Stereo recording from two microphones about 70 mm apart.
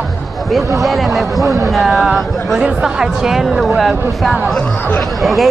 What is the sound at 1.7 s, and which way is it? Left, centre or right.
Speech, centre.